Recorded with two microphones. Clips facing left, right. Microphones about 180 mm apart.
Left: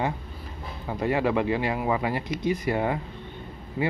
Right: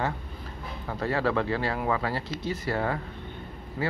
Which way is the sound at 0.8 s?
15° left (ahead or behind).